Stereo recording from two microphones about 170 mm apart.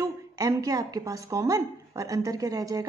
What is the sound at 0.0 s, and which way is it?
Speech, 20° right (ahead or behind).